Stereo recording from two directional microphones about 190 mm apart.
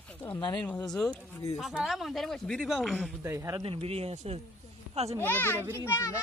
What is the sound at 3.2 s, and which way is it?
Speech, 15° right (ahead or behind).